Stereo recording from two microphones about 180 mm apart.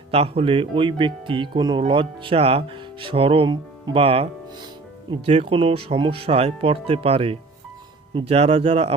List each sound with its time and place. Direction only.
0.1 s speech: 35° right (ahead or behind)